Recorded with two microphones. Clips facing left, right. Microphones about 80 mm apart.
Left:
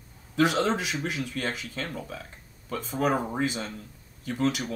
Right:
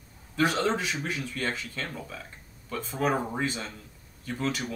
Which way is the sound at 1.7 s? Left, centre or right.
Left.